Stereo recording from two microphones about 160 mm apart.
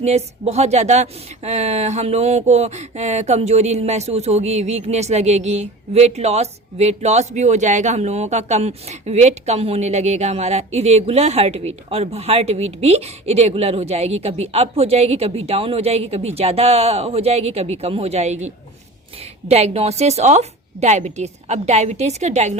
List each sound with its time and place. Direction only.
0.0 s a woman's voice: 40° right (ahead or behind)
1.5 s a sound: 45° right (ahead or behind)
19.5 s a woman's voice: 40° right (ahead or behind)